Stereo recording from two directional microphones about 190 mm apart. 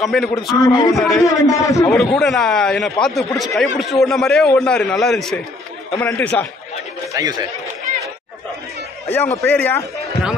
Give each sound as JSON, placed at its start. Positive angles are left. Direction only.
{"t": 0.0, "sound": "speech", "side_deg": 0}
{"t": 0.6, "sound": "a man's voice", "side_deg": 15}
{"t": 0.9, "sound": "speech", "side_deg": 0}
{"t": 1.2, "sound": "a man's voice", "side_deg": 15}
{"t": 2.0, "sound": "speech", "side_deg": 0}
{"t": 5.9, "sound": "a man's voice", "side_deg": 10}
{"t": 7.2, "sound": "speech", "side_deg": -20}
{"t": 9.4, "sound": "a man's voice", "side_deg": 10}